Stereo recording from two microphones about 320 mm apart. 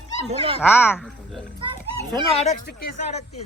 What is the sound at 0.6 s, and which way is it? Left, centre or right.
Speech, centre.